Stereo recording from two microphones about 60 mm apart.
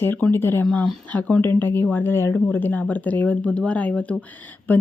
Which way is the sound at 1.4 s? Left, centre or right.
Left.